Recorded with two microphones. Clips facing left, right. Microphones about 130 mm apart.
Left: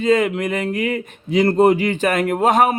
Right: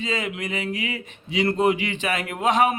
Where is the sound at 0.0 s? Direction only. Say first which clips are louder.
Left 11 dB; 50° left (ahead or behind).